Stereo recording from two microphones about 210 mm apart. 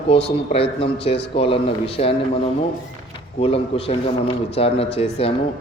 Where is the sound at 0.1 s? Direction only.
25° left (ahead or behind).